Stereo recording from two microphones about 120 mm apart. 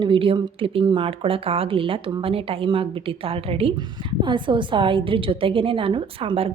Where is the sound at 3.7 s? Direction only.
40° right (ahead or behind).